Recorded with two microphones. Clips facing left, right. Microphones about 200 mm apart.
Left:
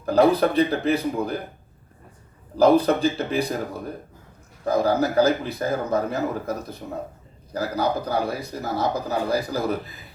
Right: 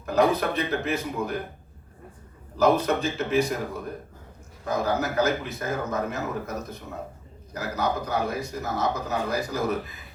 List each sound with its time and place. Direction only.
0.0 s a man's voice: 35° left (ahead or behind)
2.6 s a man's voice: 35° left (ahead or behind)
4.6 s a man's voice: 35° left (ahead or behind)